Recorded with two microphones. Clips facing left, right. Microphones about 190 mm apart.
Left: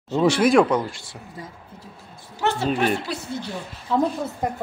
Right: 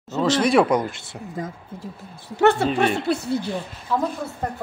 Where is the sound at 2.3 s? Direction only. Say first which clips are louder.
Right 6 dB; 60° right (ahead or behind).